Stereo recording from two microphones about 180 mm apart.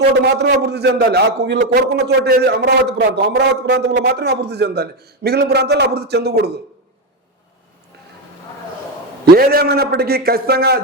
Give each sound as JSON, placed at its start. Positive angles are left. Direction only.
{"t": 0.2, "sound": "a man's voice", "side_deg": -70}
{"t": 9.2, "sound": "a man's voice", "side_deg": -55}